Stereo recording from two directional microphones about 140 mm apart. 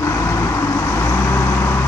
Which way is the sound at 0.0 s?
20° left (ahead or behind).